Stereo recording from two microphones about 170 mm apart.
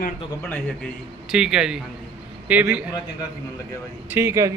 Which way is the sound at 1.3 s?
5° right (ahead or behind).